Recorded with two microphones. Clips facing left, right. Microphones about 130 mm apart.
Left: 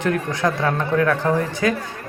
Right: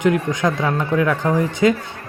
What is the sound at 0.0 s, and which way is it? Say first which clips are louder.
A man's voice: right 3 dB; 15° right (ahead or behind).